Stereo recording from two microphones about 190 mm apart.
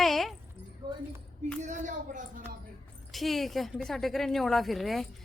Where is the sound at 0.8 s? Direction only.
20° right (ahead or behind).